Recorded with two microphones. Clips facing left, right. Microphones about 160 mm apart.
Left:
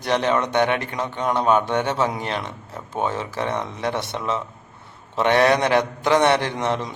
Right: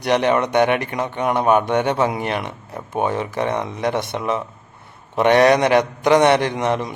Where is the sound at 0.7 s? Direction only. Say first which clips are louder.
Right 4 dB; 60° right (ahead or behind).